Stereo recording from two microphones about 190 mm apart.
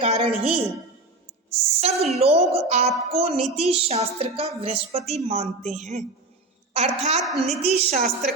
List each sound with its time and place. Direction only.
0.0 s a woman's voice: 35° right (ahead or behind)
7.2 s a woman's voice: centre (ahead or behind)
7.6 s a woman's voice: 35° right (ahead or behind)